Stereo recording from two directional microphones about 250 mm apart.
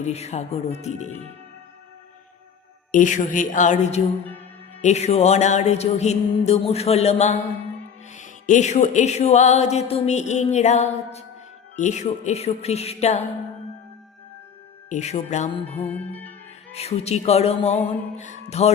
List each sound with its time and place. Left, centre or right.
0.0 s music: left
2.9 s a woman's voice: left
4.8 s music: left
14.8 s music: left
15.7 s music: centre
16.7 s music: left